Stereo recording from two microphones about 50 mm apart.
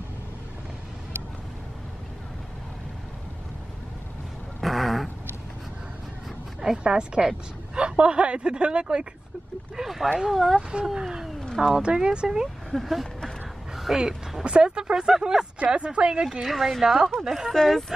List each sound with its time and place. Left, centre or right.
4.6 s a sound: centre
6.6 s a woman's voice: centre
9.8 s speech: centre
10.9 s speech: centre
12.7 s speech: centre
15.6 s a woman's voice: right
16.4 s speech: centre
17.6 s speech: centre